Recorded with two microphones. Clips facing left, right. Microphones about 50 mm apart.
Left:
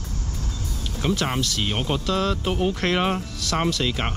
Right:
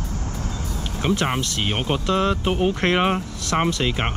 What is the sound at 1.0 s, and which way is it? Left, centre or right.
Speech, right.